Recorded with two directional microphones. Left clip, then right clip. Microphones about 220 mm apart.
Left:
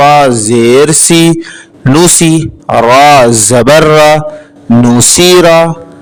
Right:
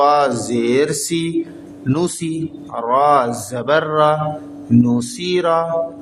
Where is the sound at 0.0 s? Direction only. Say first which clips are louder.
Left 10 dB; 50° left (ahead or behind).